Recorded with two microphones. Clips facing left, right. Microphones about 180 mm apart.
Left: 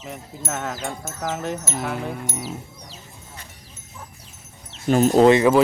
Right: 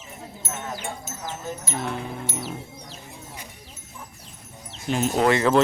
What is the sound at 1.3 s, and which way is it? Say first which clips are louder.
Speech: left 4 dB; 80° left.